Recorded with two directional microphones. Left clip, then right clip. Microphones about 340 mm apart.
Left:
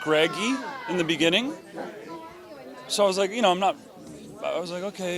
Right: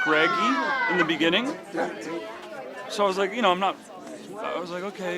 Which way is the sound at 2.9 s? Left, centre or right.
Left.